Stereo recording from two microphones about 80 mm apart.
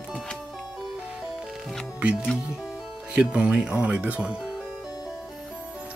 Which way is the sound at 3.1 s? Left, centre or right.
Centre.